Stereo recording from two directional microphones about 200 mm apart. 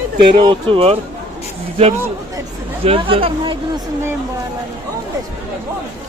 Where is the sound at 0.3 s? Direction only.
25° right (ahead or behind).